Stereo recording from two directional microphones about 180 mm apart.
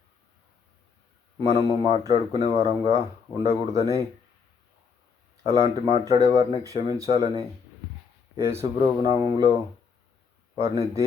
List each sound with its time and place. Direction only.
1.4 s speech: 25° right (ahead or behind)
5.4 s speech: 20° right (ahead or behind)
8.4 s speech: 20° right (ahead or behind)
10.6 s speech: 15° right (ahead or behind)